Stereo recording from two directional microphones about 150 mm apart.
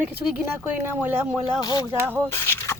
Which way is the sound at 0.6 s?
10° right (ahead or behind).